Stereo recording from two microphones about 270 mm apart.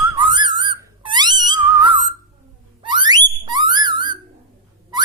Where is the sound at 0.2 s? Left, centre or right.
Centre.